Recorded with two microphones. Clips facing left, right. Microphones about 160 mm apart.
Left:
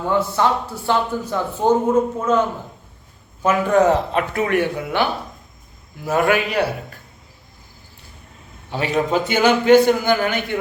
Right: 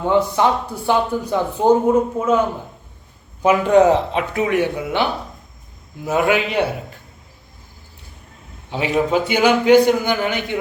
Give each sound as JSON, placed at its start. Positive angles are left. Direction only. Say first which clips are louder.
{"t": 0.1, "sound": "speech", "louder": "right 2 dB", "side_deg": -15}
{"t": 3.4, "sound": "speech", "louder": "right 3 dB", "side_deg": -20}
{"t": 6.1, "sound": "speech", "louder": "even", "side_deg": -15}
{"t": 8.7, "sound": "speech", "louder": "right 1 dB", "side_deg": -10}